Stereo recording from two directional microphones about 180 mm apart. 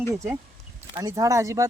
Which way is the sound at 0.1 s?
15° right (ahead or behind).